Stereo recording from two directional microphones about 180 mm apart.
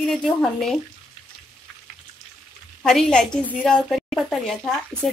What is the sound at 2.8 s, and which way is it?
A woman's voice, centre (ahead or behind).